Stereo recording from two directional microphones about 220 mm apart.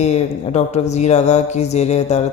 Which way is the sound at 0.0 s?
30° left (ahead or behind).